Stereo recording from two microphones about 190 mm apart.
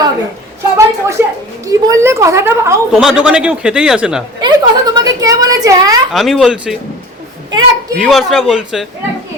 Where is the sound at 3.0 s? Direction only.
5° right (ahead or behind).